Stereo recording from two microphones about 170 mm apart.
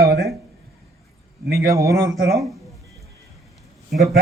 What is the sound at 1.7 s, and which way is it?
Speech, 20° right (ahead or behind).